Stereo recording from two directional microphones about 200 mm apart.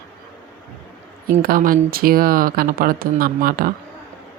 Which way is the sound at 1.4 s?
45° right (ahead or behind).